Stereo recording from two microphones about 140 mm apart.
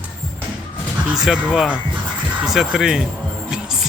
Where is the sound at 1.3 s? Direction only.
5° right (ahead or behind).